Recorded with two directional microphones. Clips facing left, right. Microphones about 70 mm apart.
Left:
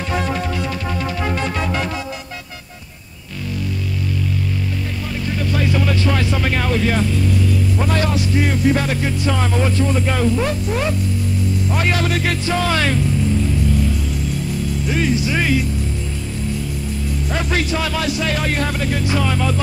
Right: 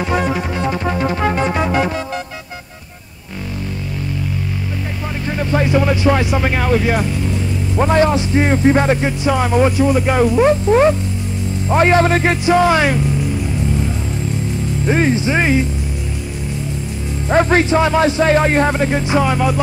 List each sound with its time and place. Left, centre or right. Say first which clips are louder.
0.0 s music: right 4 dB; centre
0.6 s music: right 5 dB; right
1.3 s music: right 5 dB; centre
5.4 s a man's voice: right 5 dB; right
12.4 s speech: right 7 dB; centre
14.9 s speech: right 5 dB; right
17.3 s speech: right 9 dB; right; by 19.6 s centre